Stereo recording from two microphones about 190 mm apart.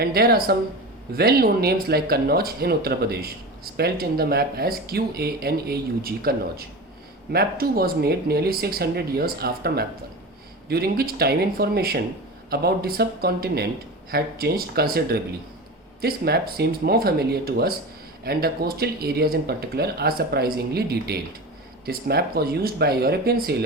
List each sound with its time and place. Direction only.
0.0 s speech: 55° right (ahead or behind)